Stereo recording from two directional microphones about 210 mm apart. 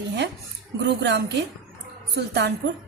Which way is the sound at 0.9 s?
55° right (ahead or behind).